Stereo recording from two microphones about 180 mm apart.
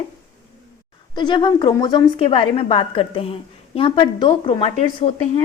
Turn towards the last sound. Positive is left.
turn(degrees=35)  # may be behind; listen again after turning